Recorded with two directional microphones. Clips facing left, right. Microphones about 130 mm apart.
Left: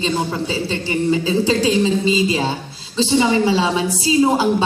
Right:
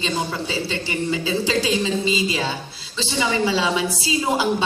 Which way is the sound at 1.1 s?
35° left (ahead or behind).